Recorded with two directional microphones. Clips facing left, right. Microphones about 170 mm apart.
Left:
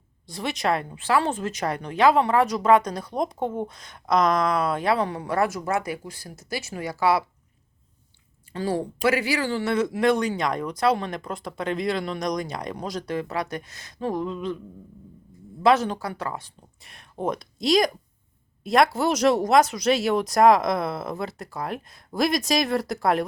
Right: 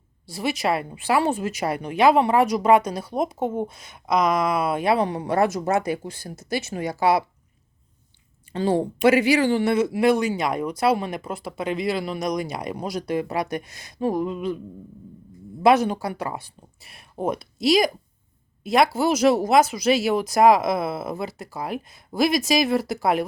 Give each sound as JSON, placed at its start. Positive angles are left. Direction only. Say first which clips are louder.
{"t": 0.3, "sound": "speech", "louder": "right 2 dB", "side_deg": -5}
{"t": 8.5, "sound": "speech", "louder": "right 4 dB", "side_deg": -25}
{"t": 15.6, "sound": "speech", "louder": "right 2 dB", "side_deg": -15}